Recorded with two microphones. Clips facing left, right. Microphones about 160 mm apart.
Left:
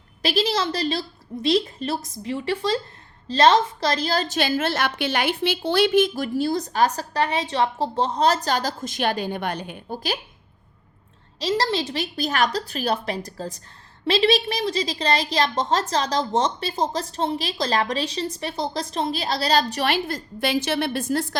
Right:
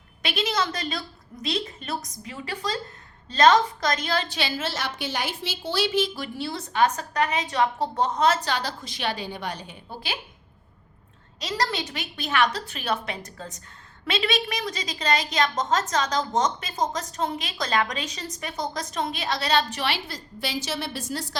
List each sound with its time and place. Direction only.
0.2 s a woman's voice: 35° left (ahead or behind); by 9.8 s 60° left (ahead or behind)
11.3 s a woman's voice: 30° left (ahead or behind); by 21.3 s 55° left (ahead or behind)